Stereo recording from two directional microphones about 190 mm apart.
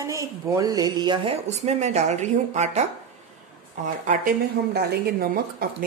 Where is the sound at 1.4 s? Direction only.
35° right (ahead or behind).